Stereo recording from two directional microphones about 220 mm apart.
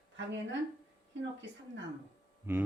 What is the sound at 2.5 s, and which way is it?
Speech, 10° right (ahead or behind).